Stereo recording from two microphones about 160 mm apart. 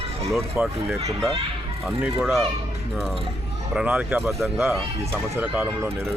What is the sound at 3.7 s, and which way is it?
Speech, 5° right (ahead or behind).